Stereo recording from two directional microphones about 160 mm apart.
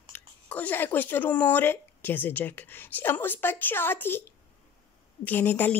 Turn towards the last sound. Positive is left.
turn(degrees=10)  # may be behind; listen again after turning